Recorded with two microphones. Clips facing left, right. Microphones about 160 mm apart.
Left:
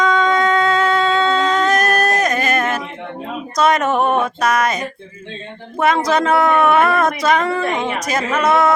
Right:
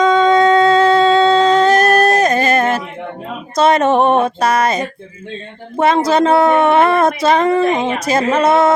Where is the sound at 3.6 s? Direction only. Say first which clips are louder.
Right 4 dB; 30° right (ahead or behind).